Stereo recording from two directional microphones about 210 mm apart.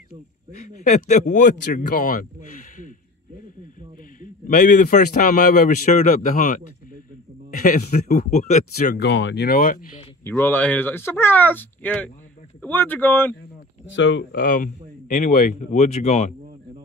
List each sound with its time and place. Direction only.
0.8 s speech: 35° left (ahead or behind)
4.2 s speech: 40° left (ahead or behind)
10.2 s speech: 10° left (ahead or behind)
13.9 s speech: 55° left (ahead or behind); by 16.3 s 35° left (ahead or behind)